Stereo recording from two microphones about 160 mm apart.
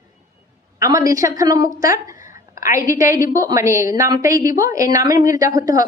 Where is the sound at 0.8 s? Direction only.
20° right (ahead or behind).